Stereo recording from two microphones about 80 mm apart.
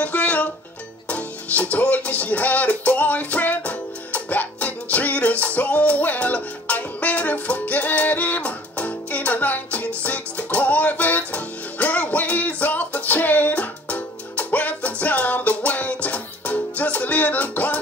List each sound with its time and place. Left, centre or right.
0.0 s music: centre